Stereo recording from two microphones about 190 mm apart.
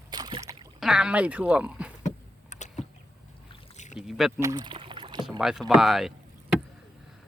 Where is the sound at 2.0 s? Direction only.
40° left (ahead or behind).